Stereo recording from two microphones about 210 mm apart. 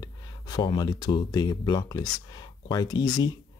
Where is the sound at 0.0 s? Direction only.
20° left (ahead or behind).